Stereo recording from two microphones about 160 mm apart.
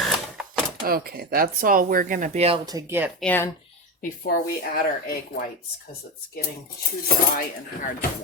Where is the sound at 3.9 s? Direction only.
70° left (ahead or behind).